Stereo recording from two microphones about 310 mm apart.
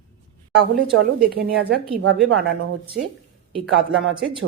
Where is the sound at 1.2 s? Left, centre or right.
Right.